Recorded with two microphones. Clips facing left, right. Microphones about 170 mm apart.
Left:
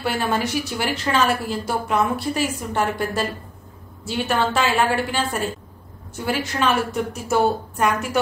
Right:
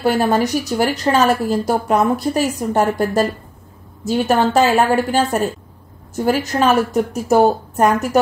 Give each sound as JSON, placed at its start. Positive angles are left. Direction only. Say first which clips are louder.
{"t": 0.0, "sound": "a woman's voice", "louder": "right 7 dB", "side_deg": -40}